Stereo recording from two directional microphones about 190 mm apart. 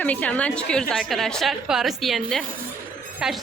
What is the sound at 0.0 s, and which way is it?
A woman's voice, 10° left (ahead or behind).